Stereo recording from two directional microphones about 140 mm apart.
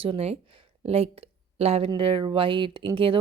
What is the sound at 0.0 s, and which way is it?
Speech, 45° right (ahead or behind).